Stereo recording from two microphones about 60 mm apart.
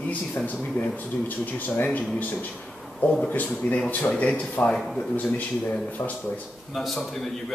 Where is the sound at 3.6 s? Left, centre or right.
Left.